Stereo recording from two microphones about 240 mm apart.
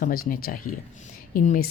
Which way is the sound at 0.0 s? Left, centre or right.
Left.